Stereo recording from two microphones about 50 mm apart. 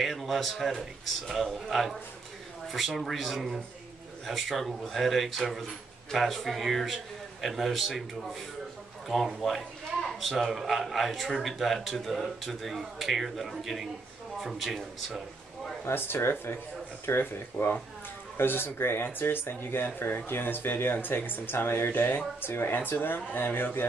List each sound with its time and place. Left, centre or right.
0.0 s speech: centre
3.0 s speech: centre
15.8 s speech: left